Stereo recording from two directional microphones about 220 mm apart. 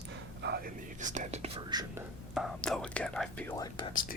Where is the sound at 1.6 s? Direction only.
20° right (ahead or behind).